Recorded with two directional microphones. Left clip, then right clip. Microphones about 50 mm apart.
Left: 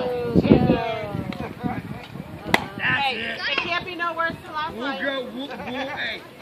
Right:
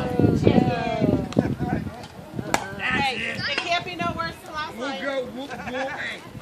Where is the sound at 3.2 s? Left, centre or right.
Centre.